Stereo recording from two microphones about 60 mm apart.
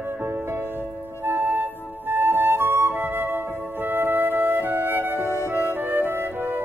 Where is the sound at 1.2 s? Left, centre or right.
Right.